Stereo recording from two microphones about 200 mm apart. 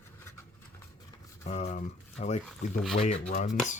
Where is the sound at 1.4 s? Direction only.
35° left (ahead or behind).